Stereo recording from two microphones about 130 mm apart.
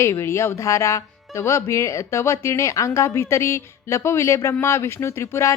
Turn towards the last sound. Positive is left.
turn(degrees=20)  # may be behind; listen again after turning